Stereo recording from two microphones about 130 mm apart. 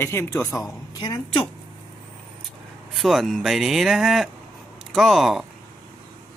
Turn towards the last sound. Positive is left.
turn(degrees=0)  # may be behind; listen again after turning